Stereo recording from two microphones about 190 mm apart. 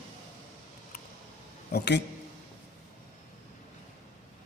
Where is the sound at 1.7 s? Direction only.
65° left (ahead or behind).